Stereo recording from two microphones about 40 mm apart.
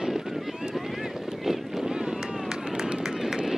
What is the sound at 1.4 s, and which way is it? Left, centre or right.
Run, centre.